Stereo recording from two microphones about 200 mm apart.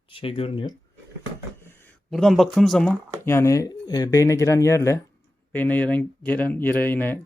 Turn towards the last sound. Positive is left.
turn(degrees=10)  # may be behind; listen again after turning